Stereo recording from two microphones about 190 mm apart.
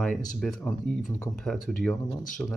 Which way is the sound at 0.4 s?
Centre (ahead or behind).